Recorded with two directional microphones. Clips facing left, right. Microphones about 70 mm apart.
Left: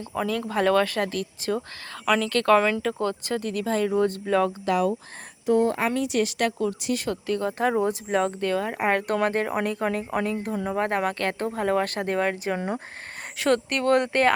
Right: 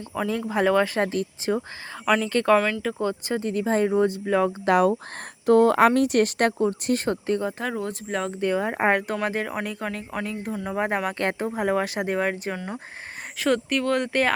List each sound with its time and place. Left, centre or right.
0.3 s speech: centre
4.6 s a woman's voice: right
5.5 s speech: right
5.9 s a woman's voice: right
6.8 s speech: right
7.6 s speech: centre
8.4 s speech: centre
9.2 s speech: centre
10.8 s speech: centre
12.5 s speech: left
13.4 s speech: centre